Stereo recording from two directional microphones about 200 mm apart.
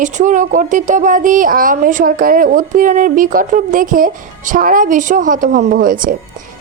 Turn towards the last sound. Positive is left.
turn(degrees=-45)  # may be behind; listen again after turning